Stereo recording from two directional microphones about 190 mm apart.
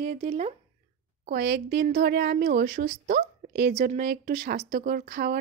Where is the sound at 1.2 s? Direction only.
60° right (ahead or behind).